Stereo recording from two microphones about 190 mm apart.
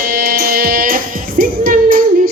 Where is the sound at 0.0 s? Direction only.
50° right (ahead or behind).